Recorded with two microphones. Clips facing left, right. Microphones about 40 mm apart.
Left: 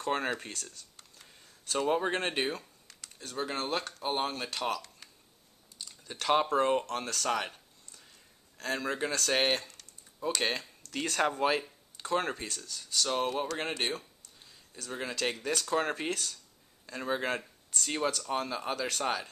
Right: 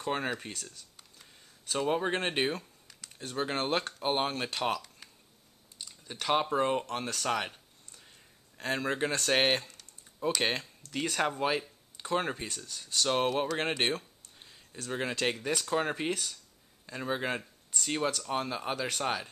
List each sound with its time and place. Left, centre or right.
0.0 s speech: centre
3.2 s speech: right
4.2 s speech: centre
5.9 s speech: centre
6.9 s a sound: centre
8.5 s speech: centre
10.4 s speech: centre
11.0 s speech: centre
12.6 s speech: right
15.3 s speech: centre